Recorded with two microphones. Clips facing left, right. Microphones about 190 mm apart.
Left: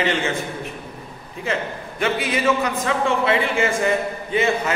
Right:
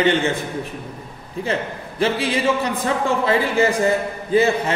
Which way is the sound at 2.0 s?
30° right (ahead or behind).